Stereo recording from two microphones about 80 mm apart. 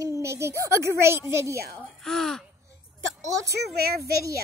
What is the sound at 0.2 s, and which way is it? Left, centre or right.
A woman's voice, right.